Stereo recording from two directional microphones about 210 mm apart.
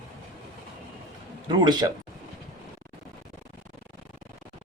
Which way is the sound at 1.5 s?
20° right (ahead or behind).